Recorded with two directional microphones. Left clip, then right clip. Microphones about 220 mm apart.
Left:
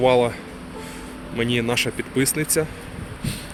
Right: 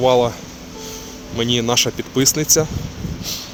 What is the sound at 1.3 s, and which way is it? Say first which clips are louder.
Speech: right 4 dB; 20° right (ahead or behind).